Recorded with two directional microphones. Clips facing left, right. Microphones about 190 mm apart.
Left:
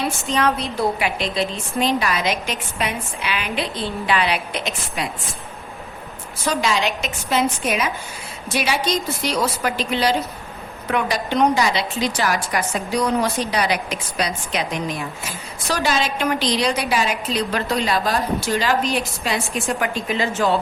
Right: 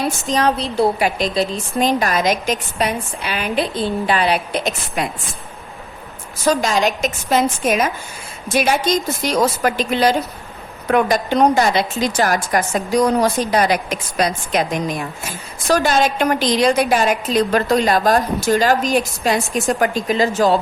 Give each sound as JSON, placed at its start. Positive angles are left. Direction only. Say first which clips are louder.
{"t": 0.0, "sound": "a woman's voice", "louder": "right 3 dB", "side_deg": -40}
{"t": 6.4, "sound": "a woman's voice", "louder": "right 4 dB", "side_deg": -45}